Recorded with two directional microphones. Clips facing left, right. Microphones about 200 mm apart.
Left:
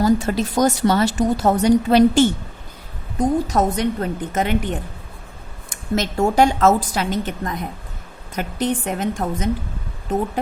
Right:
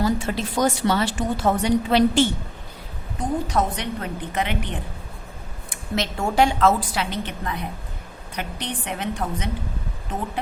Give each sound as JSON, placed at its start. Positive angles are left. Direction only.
{"t": 0.0, "sound": "a woman's voice", "side_deg": 40}
{"t": 6.0, "sound": "a woman's voice", "side_deg": 45}